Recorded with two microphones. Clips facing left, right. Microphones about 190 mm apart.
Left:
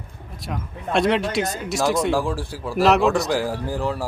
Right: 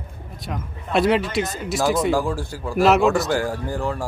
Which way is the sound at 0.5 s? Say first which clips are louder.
Even; centre (ahead or behind).